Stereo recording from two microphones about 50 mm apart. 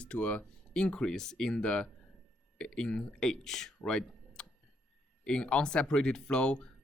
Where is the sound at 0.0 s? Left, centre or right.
Left.